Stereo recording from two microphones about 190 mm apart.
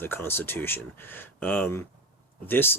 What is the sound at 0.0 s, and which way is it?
Speech, 10° left (ahead or behind).